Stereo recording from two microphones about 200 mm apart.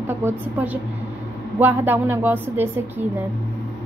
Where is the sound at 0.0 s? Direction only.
10° right (ahead or behind).